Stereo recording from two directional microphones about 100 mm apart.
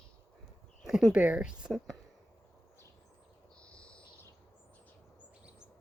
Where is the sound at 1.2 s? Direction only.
10° right (ahead or behind).